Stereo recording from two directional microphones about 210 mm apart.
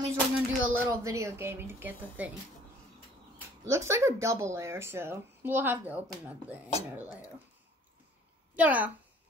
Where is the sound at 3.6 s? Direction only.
15° right (ahead or behind).